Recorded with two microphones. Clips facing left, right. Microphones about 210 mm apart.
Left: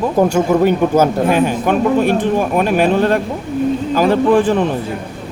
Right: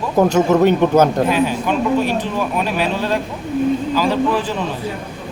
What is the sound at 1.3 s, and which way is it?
Speech, 50° left (ahead or behind).